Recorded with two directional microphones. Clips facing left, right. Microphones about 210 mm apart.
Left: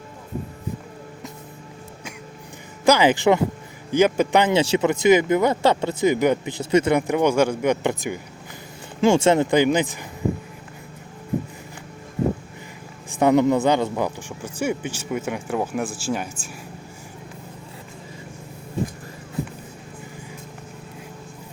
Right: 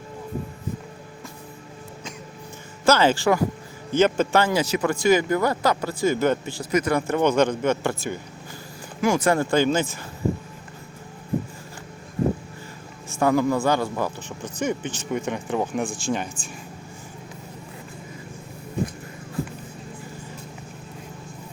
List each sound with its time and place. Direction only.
2.8 s speech: 15° left (ahead or behind)
9.0 s speech: 25° left (ahead or behind)
13.1 s speech: 20° left (ahead or behind)